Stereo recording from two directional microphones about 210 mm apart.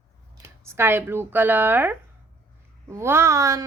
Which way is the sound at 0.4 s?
10° right (ahead or behind).